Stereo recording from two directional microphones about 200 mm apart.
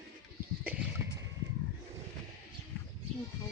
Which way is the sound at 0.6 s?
5° right (ahead or behind).